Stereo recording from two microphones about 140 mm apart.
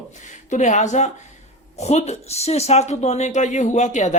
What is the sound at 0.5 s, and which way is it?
Speech, 60° left (ahead or behind).